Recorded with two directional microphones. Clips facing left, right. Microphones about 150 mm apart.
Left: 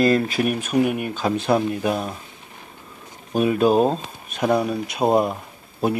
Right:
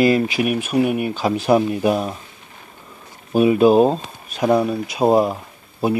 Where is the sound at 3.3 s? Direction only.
5° right (ahead or behind).